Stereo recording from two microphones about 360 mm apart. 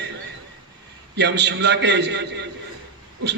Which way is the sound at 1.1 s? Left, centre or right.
Right.